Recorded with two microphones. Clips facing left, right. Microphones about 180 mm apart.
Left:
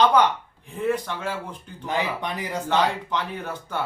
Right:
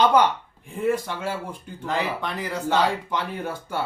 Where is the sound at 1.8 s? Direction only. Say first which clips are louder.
Even; 15° left (ahead or behind).